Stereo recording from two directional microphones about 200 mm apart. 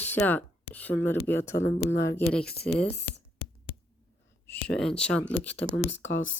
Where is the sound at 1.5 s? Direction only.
70° left (ahead or behind).